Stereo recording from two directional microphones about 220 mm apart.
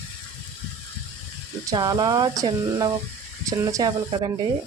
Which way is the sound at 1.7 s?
20° right (ahead or behind).